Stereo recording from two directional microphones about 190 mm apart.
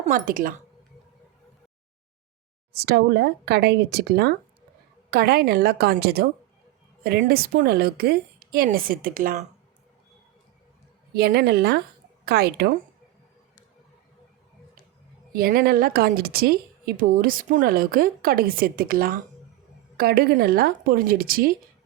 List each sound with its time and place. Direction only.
0.0 s speech: 45° right (ahead or behind)
2.7 s speech: 60° right (ahead or behind); by 9.5 s 40° right (ahead or behind)
11.1 s speech: 55° right (ahead or behind)
15.3 s speech: 50° right (ahead or behind)